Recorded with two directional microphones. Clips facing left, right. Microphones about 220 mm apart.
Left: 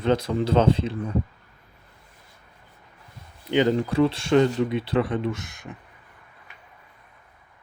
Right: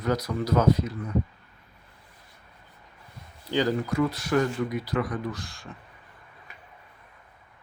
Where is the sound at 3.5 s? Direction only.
20° left (ahead or behind).